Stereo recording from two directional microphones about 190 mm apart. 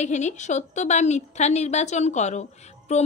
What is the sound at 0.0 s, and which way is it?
A woman's voice, 40° left (ahead or behind).